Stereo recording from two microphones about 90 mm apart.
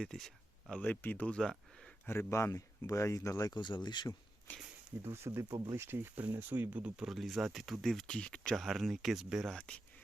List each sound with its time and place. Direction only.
0.0 s speech: 5° left (ahead or behind)
0.8 s speech: 20° left (ahead or behind)
1.4 s a sound: 5° left (ahead or behind)
2.0 s speech: 30° left (ahead or behind)
3.5 s speech: 55° left (ahead or behind)
5.0 s speech: 30° right (ahead or behind)
5.5 s speech: 50° right (ahead or behind)
5.7 s speech: 30° right (ahead or behind); by 8.6 s 10° left (ahead or behind)
8.6 s speech: centre (ahead or behind)
9.6 s speech: 10° left (ahead or behind)